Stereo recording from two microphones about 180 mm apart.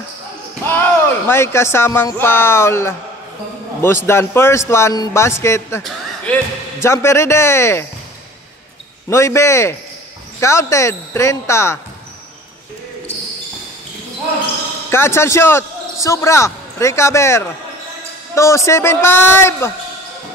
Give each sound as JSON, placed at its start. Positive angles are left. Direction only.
{"t": 0.7, "sound": "a man's voice", "side_deg": 10}
{"t": 9.1, "sound": "a man's voice", "side_deg": 15}
{"t": 14.9, "sound": "a man's voice", "side_deg": 15}